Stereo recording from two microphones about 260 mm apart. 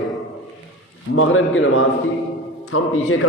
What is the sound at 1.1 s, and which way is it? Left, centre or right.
A man's voice, left.